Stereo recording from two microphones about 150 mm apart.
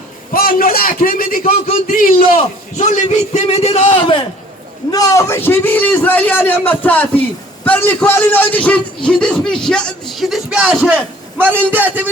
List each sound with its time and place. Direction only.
0.3 s a man's voice: 75° left (ahead or behind); by 4.2 s 35° left (ahead or behind)
4.9 s a man's voice: 25° left (ahead or behind); by 12.1 s 10° right (ahead or behind)